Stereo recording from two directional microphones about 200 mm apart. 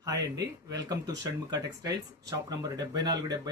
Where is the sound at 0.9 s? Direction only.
20° right (ahead or behind).